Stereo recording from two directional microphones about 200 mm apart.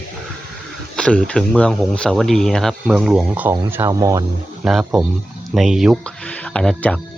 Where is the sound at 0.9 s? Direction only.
5° left (ahead or behind).